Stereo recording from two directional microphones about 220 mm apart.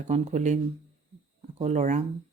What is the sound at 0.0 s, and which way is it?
Speech, 30° right (ahead or behind).